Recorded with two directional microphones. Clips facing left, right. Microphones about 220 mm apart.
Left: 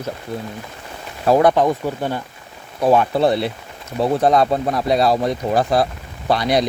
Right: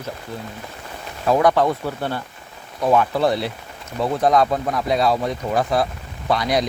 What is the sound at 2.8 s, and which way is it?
Speech, 30° left (ahead or behind).